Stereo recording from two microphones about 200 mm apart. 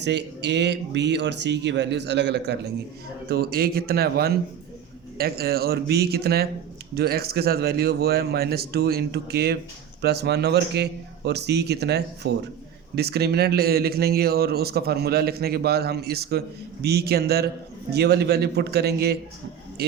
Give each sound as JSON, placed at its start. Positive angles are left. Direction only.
{"t": 0.0, "sound": "a man's voice", "side_deg": -60}